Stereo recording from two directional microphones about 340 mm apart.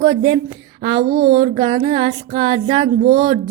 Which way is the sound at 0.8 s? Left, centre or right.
Centre.